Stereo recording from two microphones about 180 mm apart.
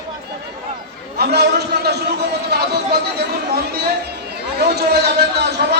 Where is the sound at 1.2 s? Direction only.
65° right (ahead or behind).